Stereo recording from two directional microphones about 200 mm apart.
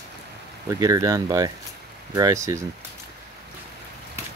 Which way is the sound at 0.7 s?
15° right (ahead or behind).